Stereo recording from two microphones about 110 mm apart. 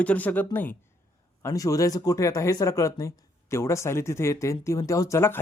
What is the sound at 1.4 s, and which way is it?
Speech, 30° left (ahead or behind).